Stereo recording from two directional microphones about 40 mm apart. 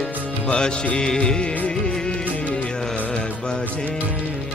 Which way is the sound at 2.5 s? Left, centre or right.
Centre.